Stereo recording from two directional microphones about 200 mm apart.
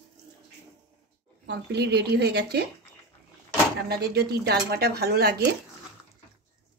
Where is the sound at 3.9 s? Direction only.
50° right (ahead or behind).